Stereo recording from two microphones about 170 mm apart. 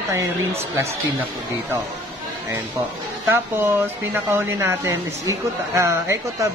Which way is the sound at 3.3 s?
10° right (ahead or behind).